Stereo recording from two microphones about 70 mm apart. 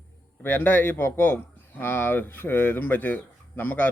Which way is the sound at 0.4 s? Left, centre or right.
Left.